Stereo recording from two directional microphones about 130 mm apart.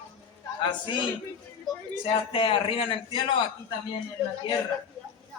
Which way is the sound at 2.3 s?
40° left (ahead or behind).